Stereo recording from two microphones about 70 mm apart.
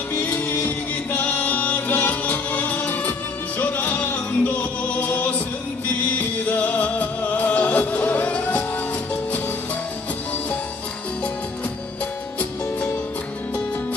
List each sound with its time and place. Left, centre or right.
0.1 s music: left